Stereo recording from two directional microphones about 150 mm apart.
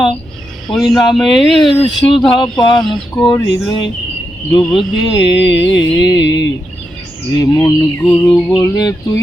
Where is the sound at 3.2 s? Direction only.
20° left (ahead or behind).